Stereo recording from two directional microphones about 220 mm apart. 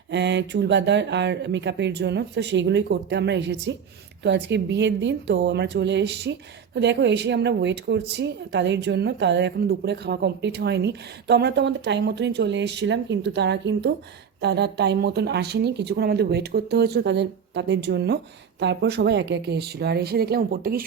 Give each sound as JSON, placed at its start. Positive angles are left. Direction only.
{"t": 0.1, "sound": "a woman's voice", "side_deg": -50}